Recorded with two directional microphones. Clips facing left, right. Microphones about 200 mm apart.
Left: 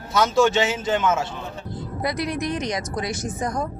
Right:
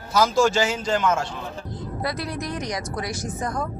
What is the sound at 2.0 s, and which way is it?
Speech, 15° left (ahead or behind).